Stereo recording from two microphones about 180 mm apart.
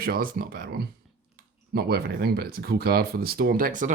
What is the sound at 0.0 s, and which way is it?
Speech, 55° right (ahead or behind).